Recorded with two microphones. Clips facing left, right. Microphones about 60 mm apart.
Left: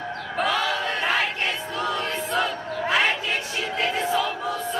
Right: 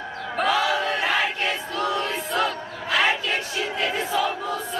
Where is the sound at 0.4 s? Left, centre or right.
Centre.